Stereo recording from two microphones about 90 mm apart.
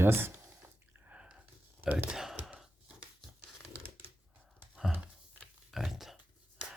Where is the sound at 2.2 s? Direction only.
5° right (ahead or behind).